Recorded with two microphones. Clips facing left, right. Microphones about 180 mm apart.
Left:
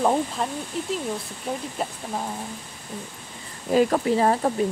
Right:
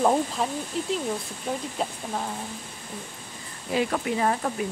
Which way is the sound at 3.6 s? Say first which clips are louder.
Left 6 dB; 40° left (ahead or behind).